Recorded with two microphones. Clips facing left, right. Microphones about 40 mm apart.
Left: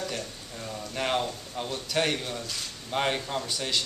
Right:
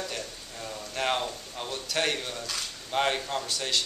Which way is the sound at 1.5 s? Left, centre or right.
Centre.